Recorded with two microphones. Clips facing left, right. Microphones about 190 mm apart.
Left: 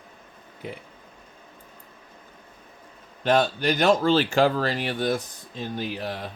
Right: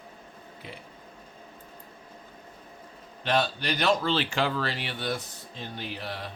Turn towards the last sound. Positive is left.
turn(degrees=45)  # may be behind; listen again after turning